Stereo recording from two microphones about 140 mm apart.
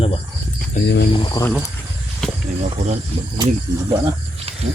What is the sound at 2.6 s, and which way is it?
Speech, 55° right (ahead or behind).